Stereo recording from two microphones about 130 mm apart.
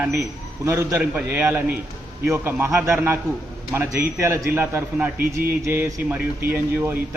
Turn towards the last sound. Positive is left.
turn(degrees=-15)  # may be behind; listen again after turning